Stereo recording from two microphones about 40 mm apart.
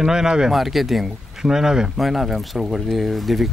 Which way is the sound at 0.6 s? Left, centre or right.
Centre.